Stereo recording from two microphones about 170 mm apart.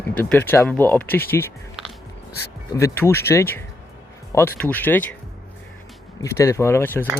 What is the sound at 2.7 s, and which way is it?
Speech, 15° left (ahead or behind).